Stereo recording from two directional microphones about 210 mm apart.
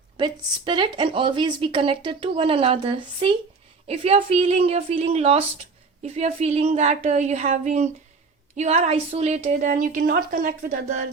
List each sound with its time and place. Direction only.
0.2 s a woman's voice: 25° right (ahead or behind); by 10.9 s 40° right (ahead or behind)